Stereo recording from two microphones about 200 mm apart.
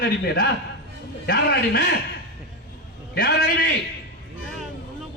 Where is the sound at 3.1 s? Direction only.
55° left (ahead or behind).